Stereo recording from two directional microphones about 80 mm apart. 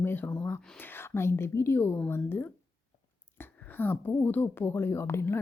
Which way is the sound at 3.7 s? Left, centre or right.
Left.